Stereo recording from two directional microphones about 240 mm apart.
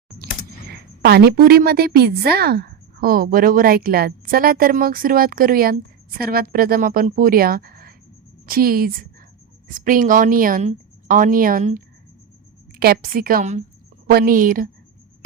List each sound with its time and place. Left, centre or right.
0.7 s a woman's voice: right
12.8 s a woman's voice: right